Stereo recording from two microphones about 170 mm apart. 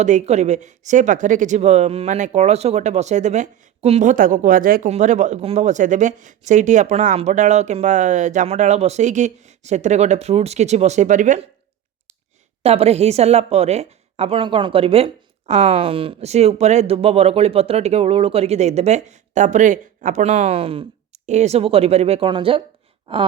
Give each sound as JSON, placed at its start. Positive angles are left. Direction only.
{"t": 0.0, "sound": "speech", "side_deg": -45}
{"t": 4.9, "sound": "speech", "side_deg": -45}
{"t": 12.6, "sound": "a woman's voice", "side_deg": -35}